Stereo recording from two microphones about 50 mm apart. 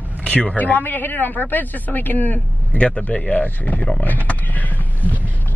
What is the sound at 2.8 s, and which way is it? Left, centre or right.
Speech, left.